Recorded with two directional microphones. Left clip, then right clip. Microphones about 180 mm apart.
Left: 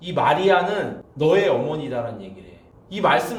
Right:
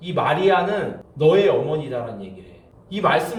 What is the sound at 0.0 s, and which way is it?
A man's voice, 35° left (ahead or behind).